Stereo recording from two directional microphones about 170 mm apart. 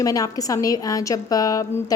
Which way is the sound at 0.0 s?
20° left (ahead or behind).